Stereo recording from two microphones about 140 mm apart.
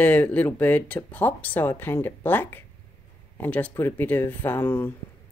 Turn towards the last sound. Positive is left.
turn(degrees=15)  # may be behind; listen again after turning